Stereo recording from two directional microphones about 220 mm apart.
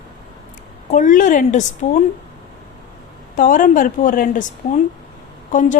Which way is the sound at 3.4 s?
35° left (ahead or behind).